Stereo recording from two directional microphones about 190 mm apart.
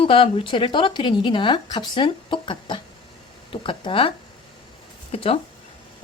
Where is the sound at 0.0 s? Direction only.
25° left (ahead or behind).